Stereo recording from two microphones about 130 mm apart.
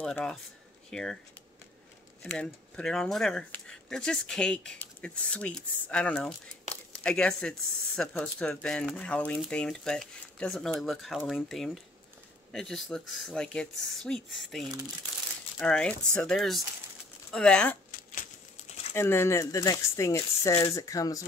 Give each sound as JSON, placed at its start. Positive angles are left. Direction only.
{"t": 0.0, "sound": "speech", "side_deg": 5}
{"t": 2.2, "sound": "speech", "side_deg": 5}
{"t": 18.9, "sound": "speech", "side_deg": 20}